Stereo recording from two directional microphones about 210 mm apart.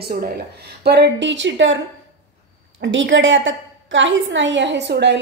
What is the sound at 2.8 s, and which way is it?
A woman's voice, 65° right (ahead or behind).